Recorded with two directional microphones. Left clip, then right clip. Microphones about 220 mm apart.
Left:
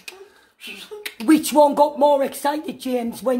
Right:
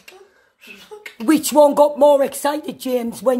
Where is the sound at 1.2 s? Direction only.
25° right (ahead or behind).